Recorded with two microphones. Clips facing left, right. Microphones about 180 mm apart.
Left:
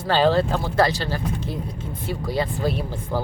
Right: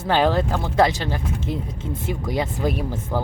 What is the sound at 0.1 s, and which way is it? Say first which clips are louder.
Speech: left 1 dB; 15° right (ahead or behind).